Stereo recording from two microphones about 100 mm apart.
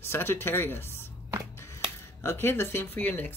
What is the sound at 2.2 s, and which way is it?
Speech, 25° left (ahead or behind).